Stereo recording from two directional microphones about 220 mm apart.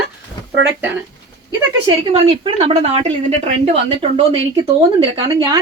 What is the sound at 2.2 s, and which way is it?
Speech, 25° right (ahead or behind).